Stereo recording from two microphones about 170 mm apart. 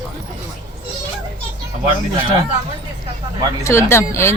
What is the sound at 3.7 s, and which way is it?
Speech, 15° left (ahead or behind).